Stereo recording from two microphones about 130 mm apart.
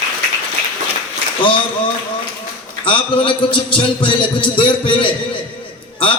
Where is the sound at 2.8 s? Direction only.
40° left (ahead or behind).